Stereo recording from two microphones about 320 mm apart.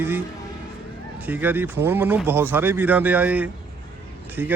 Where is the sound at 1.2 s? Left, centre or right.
Centre.